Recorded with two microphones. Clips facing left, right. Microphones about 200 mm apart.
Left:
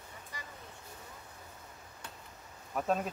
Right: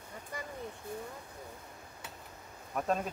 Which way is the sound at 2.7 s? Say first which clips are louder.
Even; centre (ahead or behind).